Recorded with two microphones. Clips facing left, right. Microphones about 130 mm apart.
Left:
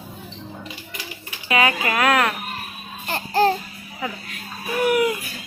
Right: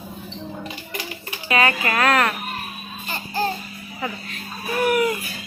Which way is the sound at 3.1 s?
75° left (ahead or behind).